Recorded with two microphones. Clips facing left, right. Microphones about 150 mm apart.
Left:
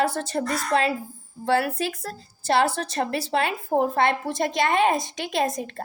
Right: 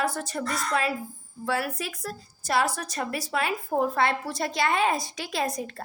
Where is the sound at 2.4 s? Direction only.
30° left (ahead or behind).